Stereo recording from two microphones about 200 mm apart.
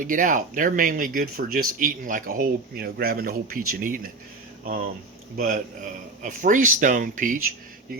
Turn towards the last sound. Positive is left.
turn(degrees=-40)  # may be behind; listen again after turning